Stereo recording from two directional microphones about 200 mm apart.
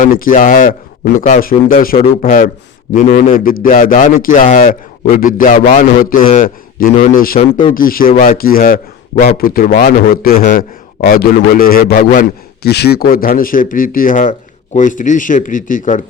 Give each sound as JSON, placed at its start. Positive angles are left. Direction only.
{"t": 0.0, "sound": "a man's voice", "side_deg": 45}